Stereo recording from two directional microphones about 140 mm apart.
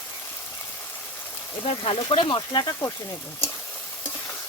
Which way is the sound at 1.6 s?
40° left (ahead or behind).